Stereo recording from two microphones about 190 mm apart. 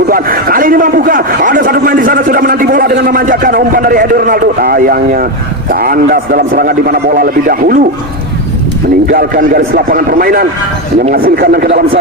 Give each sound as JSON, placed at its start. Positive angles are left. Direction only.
{"t": 0.1, "sound": "a man's voice", "side_deg": -50}
{"t": 9.1, "sound": "a man's voice", "side_deg": -50}